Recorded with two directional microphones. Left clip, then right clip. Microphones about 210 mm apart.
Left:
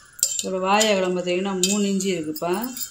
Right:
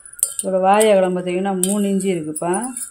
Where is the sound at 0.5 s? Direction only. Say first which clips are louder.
Right 7 dB; 45° right (ahead or behind).